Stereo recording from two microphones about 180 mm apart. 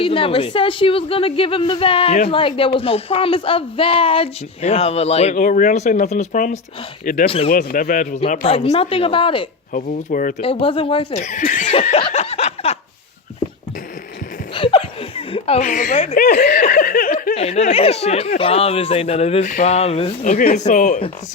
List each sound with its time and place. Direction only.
0.0 s a man's voice: 30° left (ahead or behind); by 7.3 s 50° left (ahead or behind)
7.3 s speech: 30° left (ahead or behind)
7.5 s a man's voice: 55° left (ahead or behind)
8.4 s speech: 30° left (ahead or behind)
9.7 s a man's voice: 45° left (ahead or behind)
10.4 s speech: 30° left (ahead or behind)
11.7 s a sound: 30° left (ahead or behind)
14.5 s a sound: 30° left (ahead or behind); by 16.0 s 45° left (ahead or behind)
16.1 s speech: 55° left (ahead or behind)
16.5 s laughter: 45° left (ahead or behind)
17.3 s speech: 35° left (ahead or behind)
20.4 s a man's voice: 50° left (ahead or behind)